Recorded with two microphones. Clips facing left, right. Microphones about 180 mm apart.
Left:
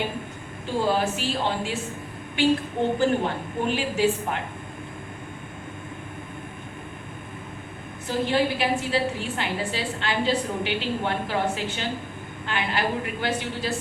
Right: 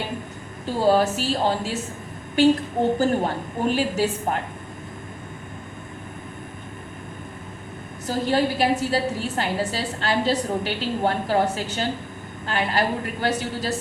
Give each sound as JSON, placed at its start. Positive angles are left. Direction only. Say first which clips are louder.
{"t": 0.6, "sound": "a woman's voice", "louder": "right 5 dB", "side_deg": -40}
{"t": 8.0, "sound": "a woman's voice", "louder": "right 2 dB", "side_deg": -40}